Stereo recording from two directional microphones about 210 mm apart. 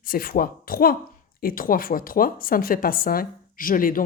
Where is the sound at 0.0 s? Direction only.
45° left (ahead or behind).